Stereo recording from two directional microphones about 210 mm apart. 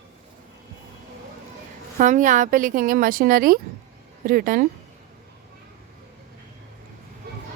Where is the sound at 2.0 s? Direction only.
35° right (ahead or behind).